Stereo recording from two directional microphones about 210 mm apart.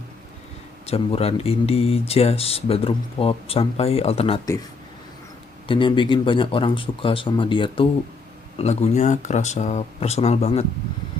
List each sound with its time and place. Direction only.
0.9 s speech: 30° left (ahead or behind)
5.6 s speech: 25° left (ahead or behind)